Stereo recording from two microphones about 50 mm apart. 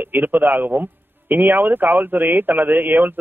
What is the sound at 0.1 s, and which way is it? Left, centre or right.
A man's voice, right.